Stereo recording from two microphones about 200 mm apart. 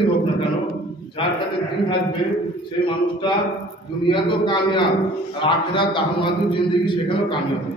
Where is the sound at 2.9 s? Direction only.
25° left (ahead or behind).